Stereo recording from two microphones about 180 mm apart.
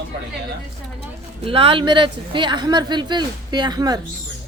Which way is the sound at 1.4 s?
30° right (ahead or behind).